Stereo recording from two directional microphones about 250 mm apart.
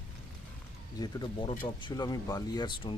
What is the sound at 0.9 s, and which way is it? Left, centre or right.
Speech, centre.